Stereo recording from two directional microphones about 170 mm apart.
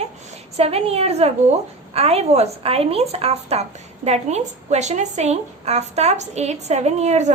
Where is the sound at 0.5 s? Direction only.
35° right (ahead or behind).